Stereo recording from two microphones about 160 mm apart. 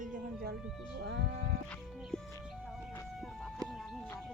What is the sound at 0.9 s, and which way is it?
Music, 90° right.